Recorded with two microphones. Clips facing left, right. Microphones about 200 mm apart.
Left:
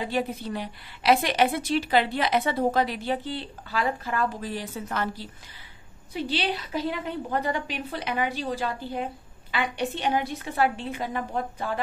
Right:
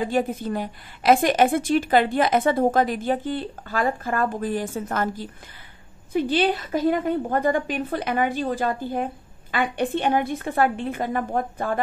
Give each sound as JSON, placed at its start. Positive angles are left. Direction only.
{"t": 0.0, "sound": "a woman's voice", "side_deg": -50}